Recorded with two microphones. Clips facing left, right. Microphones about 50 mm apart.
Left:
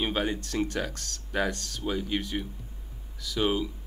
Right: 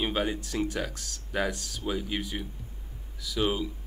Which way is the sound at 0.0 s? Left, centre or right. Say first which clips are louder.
Even; centre.